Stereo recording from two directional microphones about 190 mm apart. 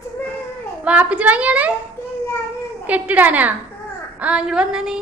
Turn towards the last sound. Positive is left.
turn(degrees=-5)  # may be behind; listen again after turning